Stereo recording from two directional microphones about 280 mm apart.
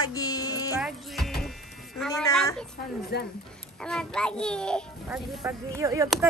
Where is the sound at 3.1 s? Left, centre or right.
Left.